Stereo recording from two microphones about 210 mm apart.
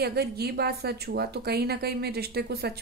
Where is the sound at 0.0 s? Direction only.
50° right (ahead or behind).